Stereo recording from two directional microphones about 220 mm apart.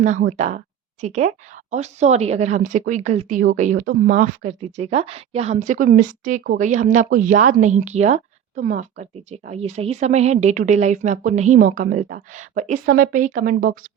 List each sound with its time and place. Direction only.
0.0 s speech: 35° right (ahead or behind)